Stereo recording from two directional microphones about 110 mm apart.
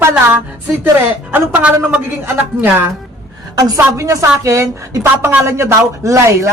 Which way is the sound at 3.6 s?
30° right (ahead or behind).